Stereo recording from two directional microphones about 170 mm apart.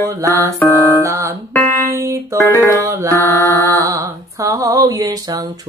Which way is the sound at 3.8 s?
20° right (ahead or behind).